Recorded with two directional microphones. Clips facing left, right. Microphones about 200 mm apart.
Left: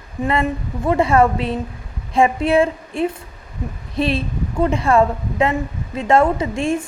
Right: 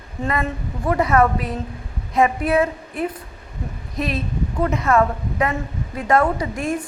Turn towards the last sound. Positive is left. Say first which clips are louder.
# left 4 dB
turn(degrees=25)  # may be behind; listen again after turning